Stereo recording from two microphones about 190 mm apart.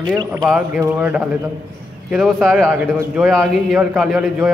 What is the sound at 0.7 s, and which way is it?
A man's voice, 10° right (ahead or behind).